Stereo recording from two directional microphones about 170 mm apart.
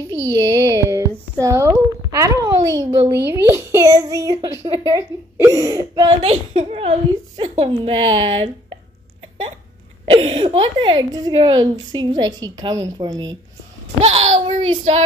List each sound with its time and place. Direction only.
0.3 s a sound: 20° right (ahead or behind)
1.4 s a child's voice: 20° right (ahead or behind)
6.2 s a woman's voice: 35° right (ahead or behind)
10.0 s a woman's voice: 30° right (ahead or behind)
14.0 s a woman's voice: 35° right (ahead or behind)